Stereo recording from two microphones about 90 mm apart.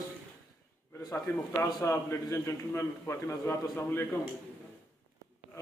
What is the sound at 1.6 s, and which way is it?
A man's voice, 35° left (ahead or behind).